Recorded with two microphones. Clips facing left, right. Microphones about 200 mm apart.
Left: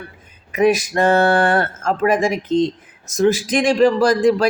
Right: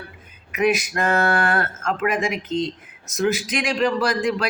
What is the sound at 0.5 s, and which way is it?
Speech, 30° left (ahead or behind).